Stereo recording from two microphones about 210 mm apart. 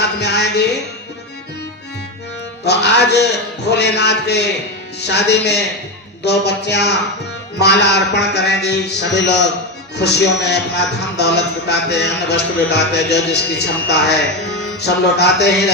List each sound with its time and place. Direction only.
0.2 s music: 55° left (ahead or behind)
2.6 s a man's voice: 50° left (ahead or behind)